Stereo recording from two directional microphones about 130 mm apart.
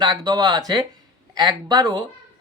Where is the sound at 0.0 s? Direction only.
35° right (ahead or behind).